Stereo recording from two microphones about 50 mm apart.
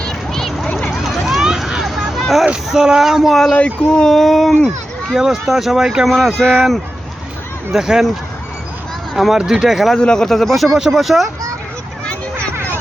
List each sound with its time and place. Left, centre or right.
0.0 s a sound: centre
1.0 s run: centre
2.0 s a sound: centre
2.6 s speech: centre
3.5 s speech: left
4.1 s speech: centre
5.1 s speech: centre
6.1 s speech: centre
7.7 s speech: centre
9.1 s speech: centre
9.9 s speech: centre